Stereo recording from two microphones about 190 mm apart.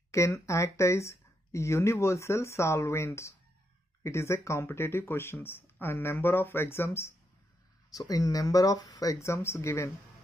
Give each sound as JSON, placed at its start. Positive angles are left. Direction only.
{"t": 0.1, "sound": "speech", "side_deg": 15}